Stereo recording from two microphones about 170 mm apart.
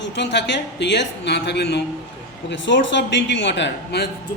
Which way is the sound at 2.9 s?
90° left.